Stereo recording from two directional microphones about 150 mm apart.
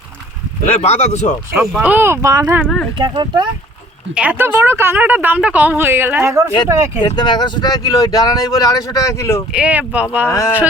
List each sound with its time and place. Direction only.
0.6 s speech: 45° left (ahead or behind)
1.8 s a woman's voice: 15° right (ahead or behind)
3.0 s speech: 30° right (ahead or behind)
4.1 s a woman's voice: 10° right (ahead or behind)
7.0 s speech: 30° left (ahead or behind)
9.5 s a woman's voice: 10° right (ahead or behind)
10.2 s speech: 20° left (ahead or behind)